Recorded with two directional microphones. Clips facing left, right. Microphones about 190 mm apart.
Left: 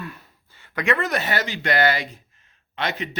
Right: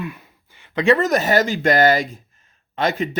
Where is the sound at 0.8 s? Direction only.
40° right (ahead or behind).